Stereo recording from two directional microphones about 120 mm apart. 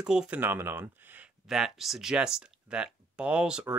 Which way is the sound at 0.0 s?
5° right (ahead or behind).